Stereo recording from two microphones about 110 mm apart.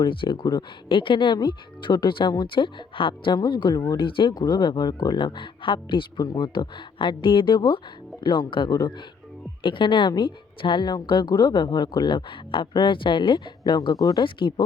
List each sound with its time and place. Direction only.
0.0 s a woman's voice: 50° left (ahead or behind)
14.3 s a woman's voice: 50° left (ahead or behind)